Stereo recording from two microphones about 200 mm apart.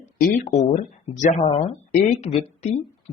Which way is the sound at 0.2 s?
35° left (ahead or behind).